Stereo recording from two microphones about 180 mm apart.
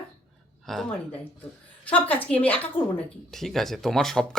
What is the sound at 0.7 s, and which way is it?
Speech, 5° left (ahead or behind).